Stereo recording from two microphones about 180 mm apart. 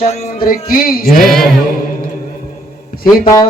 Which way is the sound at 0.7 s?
55° left (ahead or behind).